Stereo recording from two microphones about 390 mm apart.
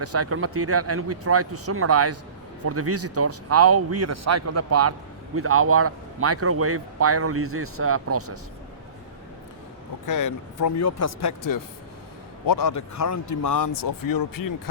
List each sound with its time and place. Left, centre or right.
0.0 s speech: right
10.1 s speech: left